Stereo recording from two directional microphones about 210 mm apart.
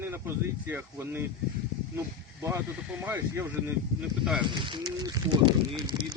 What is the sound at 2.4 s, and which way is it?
Speech, 10° right (ahead or behind).